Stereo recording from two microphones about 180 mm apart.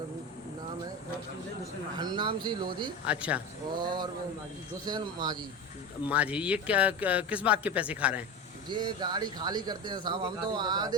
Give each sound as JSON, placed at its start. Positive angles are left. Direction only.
{"t": 2.0, "sound": "speech", "side_deg": -25}
{"t": 3.1, "sound": "speech", "side_deg": -5}
{"t": 3.8, "sound": "speech", "side_deg": -25}
{"t": 6.1, "sound": "speech", "side_deg": -5}
{"t": 8.7, "sound": "speech", "side_deg": -25}